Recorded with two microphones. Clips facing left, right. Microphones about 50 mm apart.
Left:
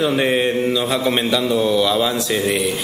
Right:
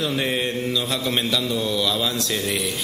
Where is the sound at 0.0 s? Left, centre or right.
Left.